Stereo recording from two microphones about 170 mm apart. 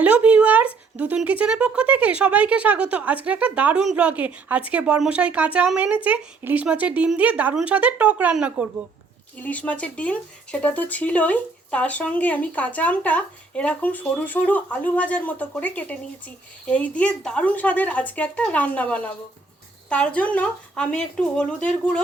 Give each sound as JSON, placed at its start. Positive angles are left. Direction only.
{"t": 0.0, "sound": "speech", "side_deg": -10}
{"t": 9.4, "sound": "speech", "side_deg": 10}